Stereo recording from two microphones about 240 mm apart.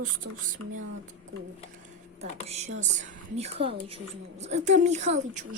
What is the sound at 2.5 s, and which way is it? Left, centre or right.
A woman's voice, right.